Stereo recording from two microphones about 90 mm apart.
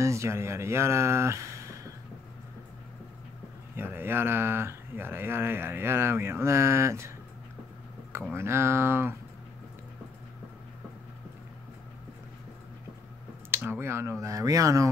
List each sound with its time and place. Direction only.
0.0 s speech: 35° right (ahead or behind)
3.7 s speech: 25° right (ahead or behind)
8.3 s speech: 30° right (ahead or behind)
13.5 s speech: 25° right (ahead or behind)
14.2 s speech: 40° right (ahead or behind)